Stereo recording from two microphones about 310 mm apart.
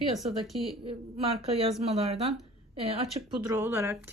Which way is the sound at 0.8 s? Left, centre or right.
Centre.